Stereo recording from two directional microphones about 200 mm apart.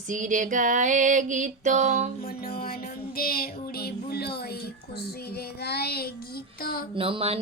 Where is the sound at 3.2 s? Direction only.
50° left (ahead or behind).